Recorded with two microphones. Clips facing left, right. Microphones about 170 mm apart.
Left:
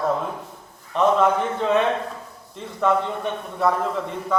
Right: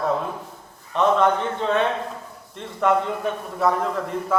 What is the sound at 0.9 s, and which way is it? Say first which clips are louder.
A man's voice: left 1 dB; centre (ahead or behind).